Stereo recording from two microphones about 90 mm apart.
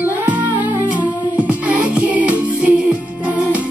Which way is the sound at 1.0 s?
15° right (ahead or behind).